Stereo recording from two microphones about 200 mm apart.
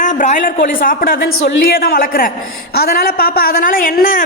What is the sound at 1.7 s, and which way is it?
A woman's voice, 50° left (ahead or behind).